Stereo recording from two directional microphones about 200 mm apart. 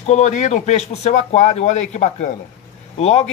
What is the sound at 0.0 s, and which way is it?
Speech, 35° left (ahead or behind).